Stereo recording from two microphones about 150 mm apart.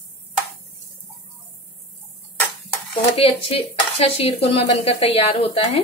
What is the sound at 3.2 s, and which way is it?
Speech, 40° left (ahead or behind).